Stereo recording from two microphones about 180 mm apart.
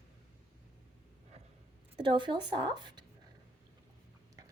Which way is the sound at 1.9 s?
25° right (ahead or behind).